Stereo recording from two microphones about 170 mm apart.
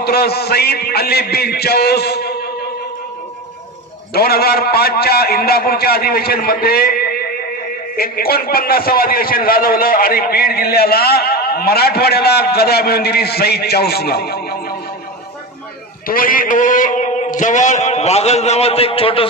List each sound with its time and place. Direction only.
0.0 s a man's voice: 65° left (ahead or behind)
4.1 s a man's voice: 65° left (ahead or behind)
16.1 s a man's voice: 55° left (ahead or behind); by 19.2 s 35° left (ahead or behind)